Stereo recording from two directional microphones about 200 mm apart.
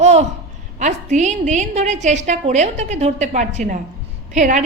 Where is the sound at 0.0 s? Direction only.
35° right (ahead or behind).